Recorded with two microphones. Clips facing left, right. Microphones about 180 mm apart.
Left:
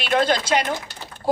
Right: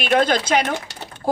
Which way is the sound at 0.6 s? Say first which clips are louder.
Right 2 dB; 70° right (ahead or behind).